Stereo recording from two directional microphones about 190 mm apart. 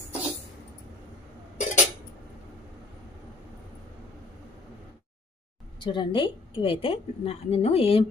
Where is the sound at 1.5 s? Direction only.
40° left (ahead or behind).